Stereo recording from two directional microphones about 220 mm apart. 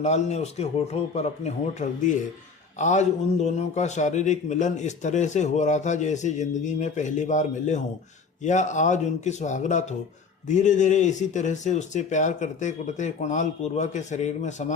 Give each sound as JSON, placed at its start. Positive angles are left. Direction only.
{"t": 0.0, "sound": "a man's voice", "side_deg": 30}